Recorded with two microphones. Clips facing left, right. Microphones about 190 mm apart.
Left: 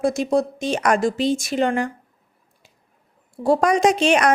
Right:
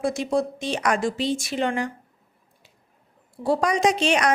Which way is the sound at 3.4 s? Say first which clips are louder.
Left 4 dB; 50° left (ahead or behind).